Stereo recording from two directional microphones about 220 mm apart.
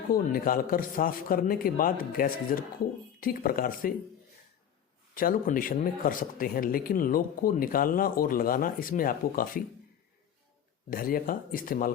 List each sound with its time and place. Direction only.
0.1 s speech: 40° left (ahead or behind)
5.1 s speech: 40° left (ahead or behind)
10.8 s speech: 40° left (ahead or behind)